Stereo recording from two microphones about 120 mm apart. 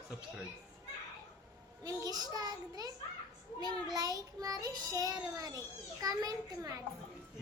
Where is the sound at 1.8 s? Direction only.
30° right (ahead or behind).